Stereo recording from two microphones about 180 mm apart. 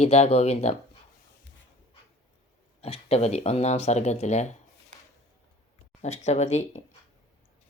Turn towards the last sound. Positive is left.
turn(degrees=40)  # may be behind; listen again after turning